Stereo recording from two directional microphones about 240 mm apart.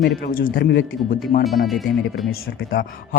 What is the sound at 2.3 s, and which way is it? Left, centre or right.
Speech, left.